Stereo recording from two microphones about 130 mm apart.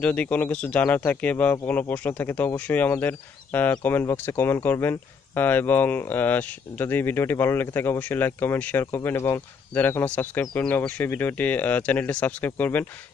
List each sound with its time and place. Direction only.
0.0 s speech: 10° left (ahead or behind)